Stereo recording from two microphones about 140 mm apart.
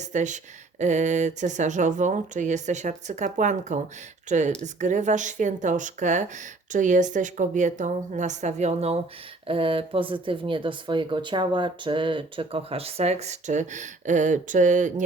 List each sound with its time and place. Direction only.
0.0 s speech: 60° right (ahead or behind)
9.5 s speech: 40° right (ahead or behind); by 15.0 s 65° right (ahead or behind)